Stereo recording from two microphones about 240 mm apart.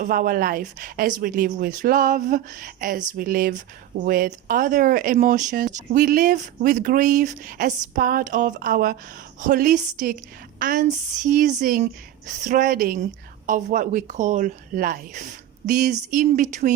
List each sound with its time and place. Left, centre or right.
0.0 s speech: right